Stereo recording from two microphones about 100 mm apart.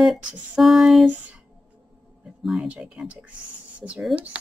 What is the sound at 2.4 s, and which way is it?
Speech, 5° right (ahead or behind).